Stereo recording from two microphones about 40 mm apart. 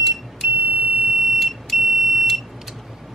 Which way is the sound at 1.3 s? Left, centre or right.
Centre.